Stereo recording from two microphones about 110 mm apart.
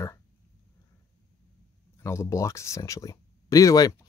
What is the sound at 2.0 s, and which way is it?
Speech, 25° left (ahead or behind).